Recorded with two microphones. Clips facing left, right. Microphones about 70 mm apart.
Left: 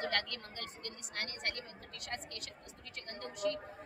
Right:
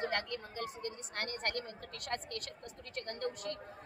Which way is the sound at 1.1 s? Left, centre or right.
Right.